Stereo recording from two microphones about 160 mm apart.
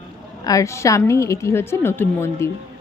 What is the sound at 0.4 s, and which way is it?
Speech, 20° left (ahead or behind).